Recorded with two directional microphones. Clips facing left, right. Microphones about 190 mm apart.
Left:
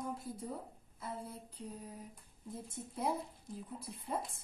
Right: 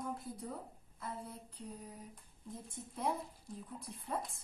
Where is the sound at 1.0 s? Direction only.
Centre (ahead or behind).